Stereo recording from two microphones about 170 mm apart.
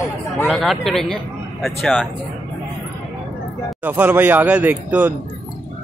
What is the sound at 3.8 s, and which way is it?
A man's voice, 10° right (ahead or behind).